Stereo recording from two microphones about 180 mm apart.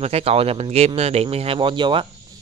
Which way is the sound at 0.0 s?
35° right (ahead or behind).